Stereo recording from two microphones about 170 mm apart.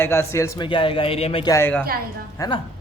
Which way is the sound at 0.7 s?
30° left (ahead or behind).